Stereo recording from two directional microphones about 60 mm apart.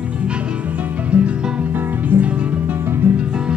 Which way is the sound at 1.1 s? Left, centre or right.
Right.